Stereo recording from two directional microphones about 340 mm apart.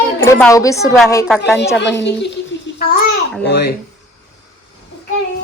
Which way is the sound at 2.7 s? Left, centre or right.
Left.